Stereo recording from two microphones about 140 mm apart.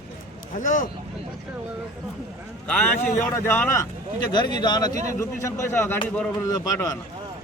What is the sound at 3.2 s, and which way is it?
Speech, 15° left (ahead or behind).